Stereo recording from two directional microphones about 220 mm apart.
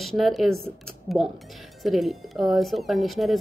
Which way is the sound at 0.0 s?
Centre (ahead or behind).